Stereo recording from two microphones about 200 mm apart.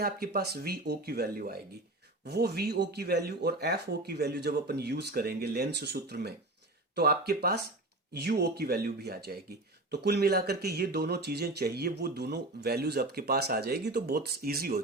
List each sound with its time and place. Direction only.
0.0 s speech: 50° right (ahead or behind)